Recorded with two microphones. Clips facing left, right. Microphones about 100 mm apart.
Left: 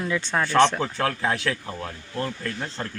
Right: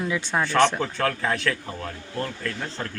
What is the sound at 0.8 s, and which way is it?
Speech, 10° left (ahead or behind).